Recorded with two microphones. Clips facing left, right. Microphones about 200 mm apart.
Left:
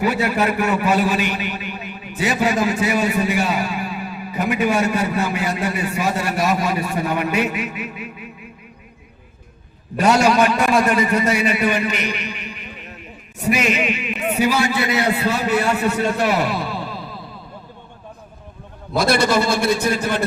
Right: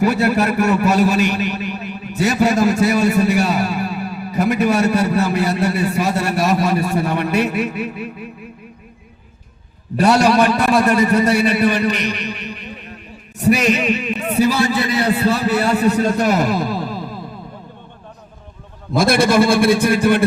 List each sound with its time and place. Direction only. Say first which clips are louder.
0.0 s a man's voice: right 3 dB; 40° right (ahead or behind)
10.0 s a man's voice: right 2 dB; 35° right (ahead or behind)
18.9 s a man's voice: right 4 dB; 50° right (ahead or behind)